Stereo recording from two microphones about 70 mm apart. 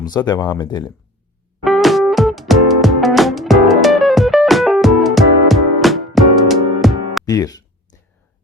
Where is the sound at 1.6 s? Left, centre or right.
Centre.